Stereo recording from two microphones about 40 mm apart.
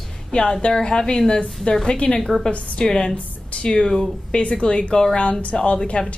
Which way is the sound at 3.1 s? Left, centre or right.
Left.